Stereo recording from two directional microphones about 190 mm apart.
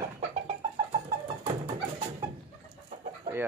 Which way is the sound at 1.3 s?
25° right (ahead or behind).